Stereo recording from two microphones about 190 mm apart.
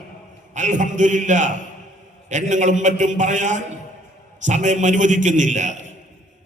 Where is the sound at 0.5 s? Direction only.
40° right (ahead or behind).